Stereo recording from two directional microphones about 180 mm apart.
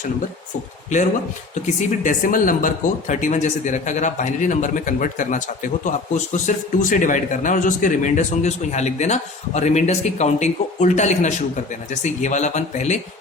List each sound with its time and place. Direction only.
1.5 s a man's voice: 40° left (ahead or behind)